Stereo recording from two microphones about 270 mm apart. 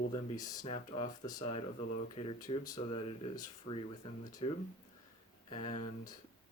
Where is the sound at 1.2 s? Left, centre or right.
Centre.